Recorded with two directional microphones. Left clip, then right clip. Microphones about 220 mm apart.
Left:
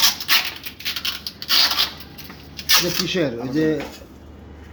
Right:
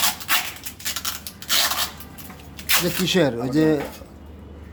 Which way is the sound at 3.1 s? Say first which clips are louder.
Right 2 dB; 30° right (ahead or behind).